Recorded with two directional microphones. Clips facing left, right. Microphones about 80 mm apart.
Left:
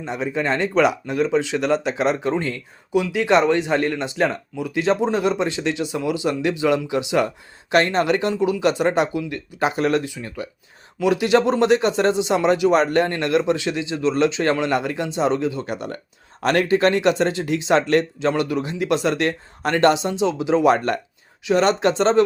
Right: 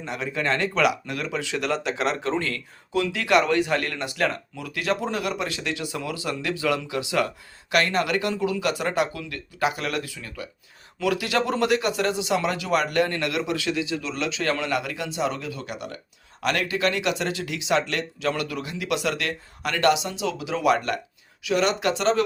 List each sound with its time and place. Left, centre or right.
0.0 s speech: left